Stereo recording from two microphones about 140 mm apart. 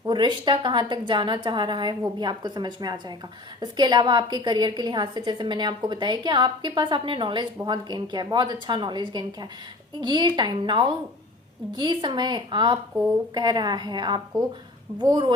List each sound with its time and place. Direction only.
0.0 s a woman's voice: 35° right (ahead or behind)